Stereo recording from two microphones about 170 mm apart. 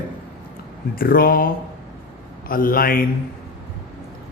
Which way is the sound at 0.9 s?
60° left (ahead or behind).